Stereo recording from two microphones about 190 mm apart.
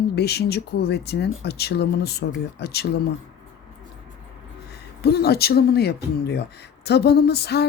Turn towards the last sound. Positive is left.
turn(degrees=60)  # may be behind; listen again after turning